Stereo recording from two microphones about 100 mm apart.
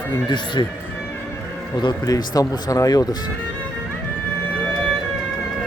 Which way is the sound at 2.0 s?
40° left (ahead or behind).